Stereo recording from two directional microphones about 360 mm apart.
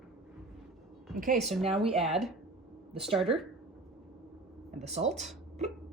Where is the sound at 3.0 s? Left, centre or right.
Centre.